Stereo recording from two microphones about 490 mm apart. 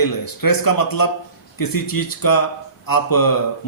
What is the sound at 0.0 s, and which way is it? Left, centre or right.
A man's voice, left.